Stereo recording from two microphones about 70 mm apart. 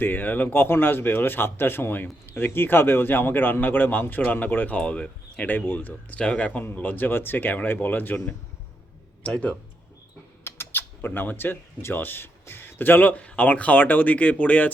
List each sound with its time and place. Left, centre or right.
0.0 s speech: left
6.1 s speech: centre
9.2 s speech: centre
10.4 s speech: left